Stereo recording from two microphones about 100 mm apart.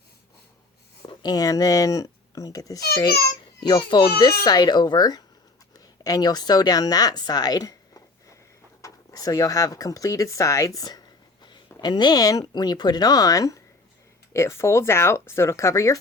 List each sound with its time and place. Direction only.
1.0 s speech: 40° left (ahead or behind)
3.6 s speech: 50° left (ahead or behind); by 16.0 s 30° left (ahead or behind)